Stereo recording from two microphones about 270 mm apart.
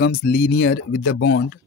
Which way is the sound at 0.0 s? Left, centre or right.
Left.